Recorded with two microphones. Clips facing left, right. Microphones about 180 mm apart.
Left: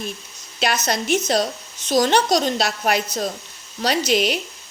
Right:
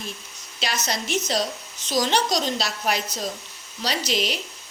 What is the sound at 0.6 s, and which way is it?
A woman's voice, 55° left (ahead or behind).